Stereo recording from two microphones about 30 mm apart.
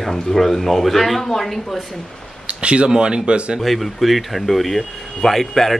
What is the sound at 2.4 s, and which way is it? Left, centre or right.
Speech, right.